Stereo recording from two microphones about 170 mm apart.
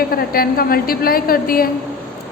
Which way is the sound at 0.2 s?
60° left (ahead or behind).